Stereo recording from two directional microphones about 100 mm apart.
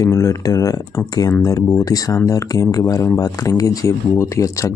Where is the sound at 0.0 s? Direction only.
35° left (ahead or behind).